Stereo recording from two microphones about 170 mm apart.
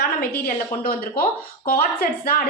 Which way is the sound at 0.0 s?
60° left (ahead or behind).